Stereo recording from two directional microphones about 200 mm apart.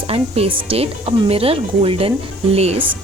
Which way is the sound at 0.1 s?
30° right (ahead or behind).